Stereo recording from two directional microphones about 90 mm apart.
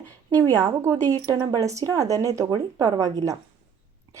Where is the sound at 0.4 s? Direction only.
40° right (ahead or behind).